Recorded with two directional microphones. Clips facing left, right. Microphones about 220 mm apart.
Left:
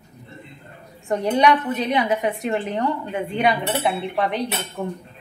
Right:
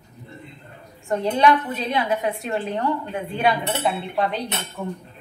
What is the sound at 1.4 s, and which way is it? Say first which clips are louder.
A woman's voice: left 1 dB; 15° left (ahead or behind).